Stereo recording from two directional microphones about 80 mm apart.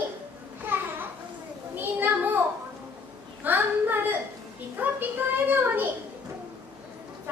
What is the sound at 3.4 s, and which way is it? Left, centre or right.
Speech, right.